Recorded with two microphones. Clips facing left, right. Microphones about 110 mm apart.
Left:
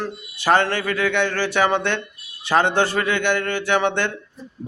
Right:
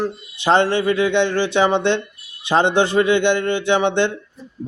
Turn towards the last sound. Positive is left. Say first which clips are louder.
# right 3 dB
turn(degrees=-20)  # may be behind; listen again after turning